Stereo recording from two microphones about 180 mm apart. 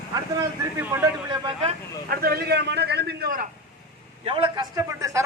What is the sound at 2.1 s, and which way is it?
Speech, 60° right (ahead or behind).